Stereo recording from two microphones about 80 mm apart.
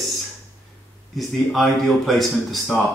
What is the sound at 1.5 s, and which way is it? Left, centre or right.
Speech, centre.